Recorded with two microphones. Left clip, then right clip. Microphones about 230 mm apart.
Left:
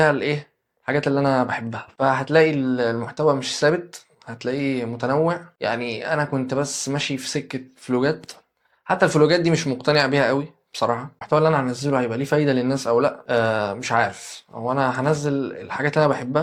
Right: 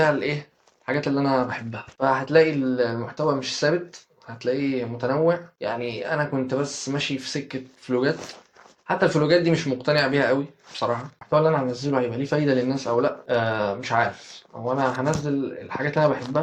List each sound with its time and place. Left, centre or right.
0.0 s speech: left